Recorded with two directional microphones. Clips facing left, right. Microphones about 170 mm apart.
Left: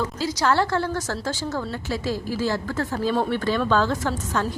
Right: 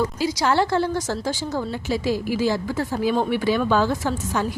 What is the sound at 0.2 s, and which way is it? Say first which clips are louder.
A woman's voice: left 1 dB; 15° right (ahead or behind).